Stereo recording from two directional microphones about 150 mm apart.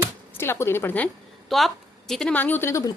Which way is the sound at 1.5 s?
Centre (ahead or behind).